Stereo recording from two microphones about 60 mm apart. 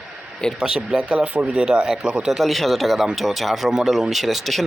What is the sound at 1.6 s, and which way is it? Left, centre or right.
Speech, centre.